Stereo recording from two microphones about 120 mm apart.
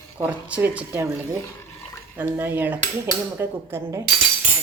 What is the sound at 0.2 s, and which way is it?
Speech, 10° right (ahead or behind).